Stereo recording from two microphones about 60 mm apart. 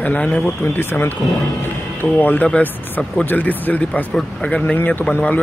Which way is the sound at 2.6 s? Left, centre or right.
Centre.